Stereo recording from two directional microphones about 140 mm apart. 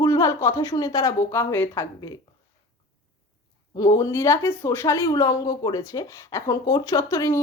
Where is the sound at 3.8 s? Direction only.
25° left (ahead or behind).